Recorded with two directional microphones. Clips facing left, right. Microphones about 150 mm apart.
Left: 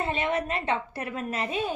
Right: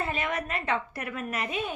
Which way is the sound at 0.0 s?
30° left (ahead or behind).